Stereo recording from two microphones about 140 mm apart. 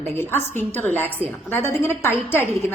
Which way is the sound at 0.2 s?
15° left (ahead or behind).